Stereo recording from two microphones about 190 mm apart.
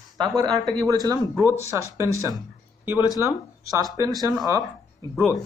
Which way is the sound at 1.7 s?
15° right (ahead or behind).